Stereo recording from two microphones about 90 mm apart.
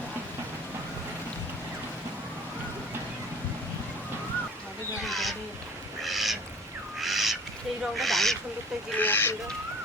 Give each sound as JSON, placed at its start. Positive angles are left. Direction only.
{"t": 5.0, "sound": "owl", "side_deg": 0}
{"t": 6.0, "sound": "duck", "side_deg": 0}
{"t": 7.0, "sound": "owl", "side_deg": 0}
{"t": 9.0, "sound": "speech", "side_deg": 20}